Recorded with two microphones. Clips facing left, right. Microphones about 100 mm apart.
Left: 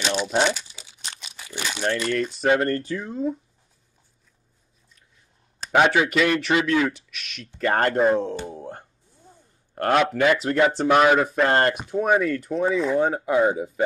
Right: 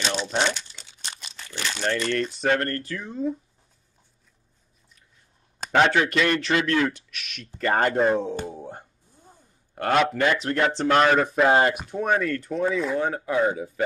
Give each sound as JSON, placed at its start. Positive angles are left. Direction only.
{"t": 0.2, "sound": "crumpling", "side_deg": 10}
{"t": 3.1, "sound": "speech", "side_deg": 5}
{"t": 5.7, "sound": "speech", "side_deg": 10}
{"t": 8.5, "sound": "a sound", "side_deg": -10}
{"t": 9.8, "sound": "speech", "side_deg": 0}
{"t": 12.9, "sound": "speech", "side_deg": 15}